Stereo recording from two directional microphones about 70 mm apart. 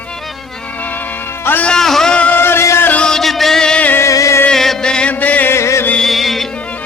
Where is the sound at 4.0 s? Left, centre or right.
Left.